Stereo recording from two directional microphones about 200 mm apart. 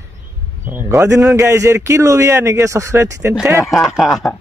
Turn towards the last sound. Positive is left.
turn(degrees=0)  # may be behind; listen again after turning